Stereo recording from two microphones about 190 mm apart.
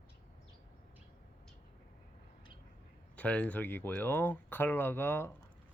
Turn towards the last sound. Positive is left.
turn(degrees=10)  # may be behind; listen again after turning